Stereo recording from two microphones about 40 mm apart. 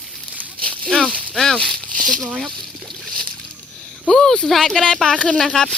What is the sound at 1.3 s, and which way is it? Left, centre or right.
Speech, centre.